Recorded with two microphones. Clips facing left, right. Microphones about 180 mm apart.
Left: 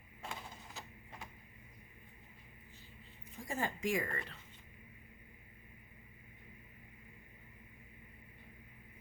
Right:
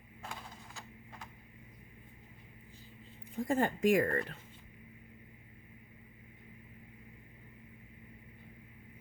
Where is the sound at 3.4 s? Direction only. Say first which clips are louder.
Right 9 dB; 55° right (ahead or behind).